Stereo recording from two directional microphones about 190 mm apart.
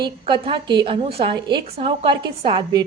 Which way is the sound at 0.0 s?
25° right (ahead or behind).